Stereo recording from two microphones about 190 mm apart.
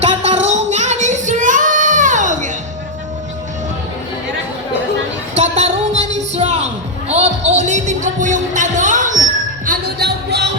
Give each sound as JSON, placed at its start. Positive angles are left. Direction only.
{"t": 0.0, "sound": "child singing", "side_deg": -35}
{"t": 5.4, "sound": "a sound", "side_deg": -35}
{"t": 7.1, "sound": "music", "side_deg": -35}
{"t": 9.6, "sound": "music", "side_deg": -60}